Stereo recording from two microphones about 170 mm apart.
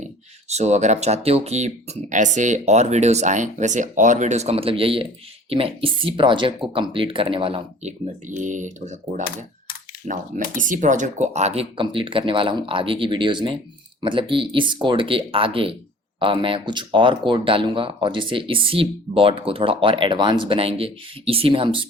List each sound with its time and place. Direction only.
0.0 s speech: 40° right (ahead or behind)